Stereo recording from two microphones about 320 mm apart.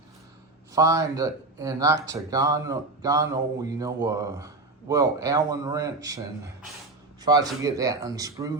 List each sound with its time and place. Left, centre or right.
0.7 s speech: centre